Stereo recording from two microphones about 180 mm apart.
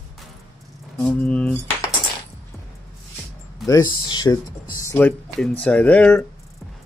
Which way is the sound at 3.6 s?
20° left (ahead or behind).